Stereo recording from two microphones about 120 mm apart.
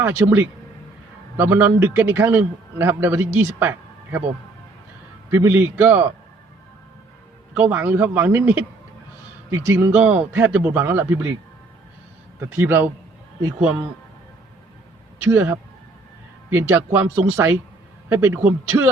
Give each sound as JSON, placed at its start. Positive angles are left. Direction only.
{"t": 0.0, "sound": "a man's voice", "side_deg": -20}
{"t": 5.3, "sound": "speech", "side_deg": -20}
{"t": 7.5, "sound": "a man's voice", "side_deg": -15}
{"t": 12.5, "sound": "speech", "side_deg": -15}
{"t": 15.2, "sound": "a man's voice", "side_deg": -15}